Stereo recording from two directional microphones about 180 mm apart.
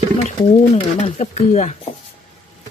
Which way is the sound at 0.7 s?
40° left (ahead or behind).